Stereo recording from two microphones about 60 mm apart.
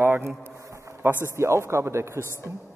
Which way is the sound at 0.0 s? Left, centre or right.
Right.